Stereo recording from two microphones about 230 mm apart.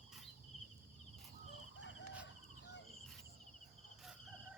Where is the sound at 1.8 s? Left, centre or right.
Left.